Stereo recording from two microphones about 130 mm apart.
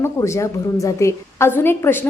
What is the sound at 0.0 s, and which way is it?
A woman's voice, 20° left (ahead or behind).